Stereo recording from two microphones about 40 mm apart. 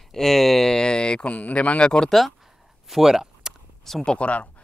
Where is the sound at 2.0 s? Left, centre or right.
Centre.